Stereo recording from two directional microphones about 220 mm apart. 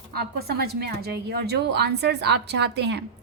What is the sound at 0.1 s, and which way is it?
A woman's voice, 45° right (ahead or behind).